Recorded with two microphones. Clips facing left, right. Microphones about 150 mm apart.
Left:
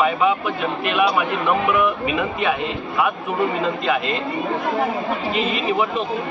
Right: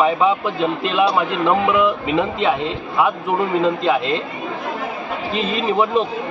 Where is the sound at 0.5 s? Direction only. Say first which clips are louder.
Right 2 dB; 30° right (ahead or behind).